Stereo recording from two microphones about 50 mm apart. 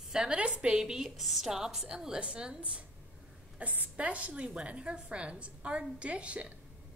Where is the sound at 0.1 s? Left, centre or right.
Centre.